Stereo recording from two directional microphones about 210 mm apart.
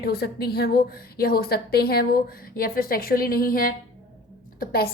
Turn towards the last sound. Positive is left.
turn(degrees=50)  # may be behind; listen again after turning